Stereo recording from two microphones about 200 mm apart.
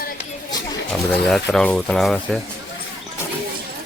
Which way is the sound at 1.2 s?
Centre (ahead or behind).